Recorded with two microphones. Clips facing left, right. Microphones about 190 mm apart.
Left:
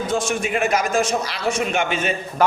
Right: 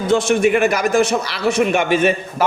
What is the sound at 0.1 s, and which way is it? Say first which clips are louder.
Speech: right 10 dB; 65° right (ahead or behind).